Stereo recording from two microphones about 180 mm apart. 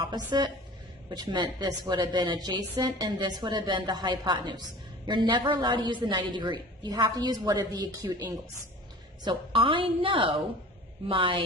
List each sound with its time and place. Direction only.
0.0 s a woman's voice: 25° right (ahead or behind)